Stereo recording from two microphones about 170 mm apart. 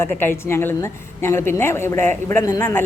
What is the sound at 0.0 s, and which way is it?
A woman's voice, 15° left (ahead or behind).